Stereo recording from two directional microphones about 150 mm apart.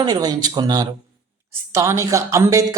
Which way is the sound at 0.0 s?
25° right (ahead or behind).